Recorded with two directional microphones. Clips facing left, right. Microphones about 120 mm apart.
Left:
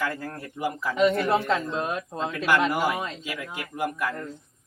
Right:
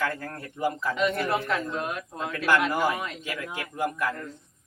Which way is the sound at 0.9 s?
25° left (ahead or behind).